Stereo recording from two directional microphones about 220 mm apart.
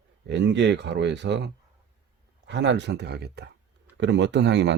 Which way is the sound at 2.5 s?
55° right (ahead or behind).